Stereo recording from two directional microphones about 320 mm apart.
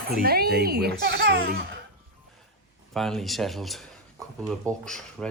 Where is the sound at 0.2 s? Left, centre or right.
Right.